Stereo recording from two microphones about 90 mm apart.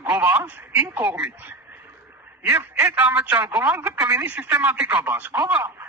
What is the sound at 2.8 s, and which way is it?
A man's voice, 15° right (ahead or behind).